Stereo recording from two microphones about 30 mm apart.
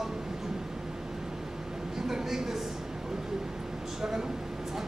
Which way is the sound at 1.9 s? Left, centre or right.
Centre.